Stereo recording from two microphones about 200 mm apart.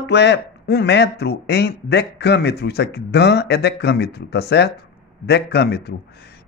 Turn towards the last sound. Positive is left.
turn(degrees=55)  # may be behind; listen again after turning